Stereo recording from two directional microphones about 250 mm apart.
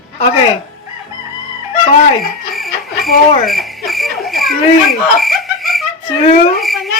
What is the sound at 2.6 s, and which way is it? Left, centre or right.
Chicken, centre.